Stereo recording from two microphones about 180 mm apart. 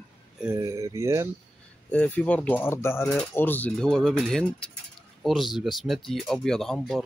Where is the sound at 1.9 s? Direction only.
10° left (ahead or behind).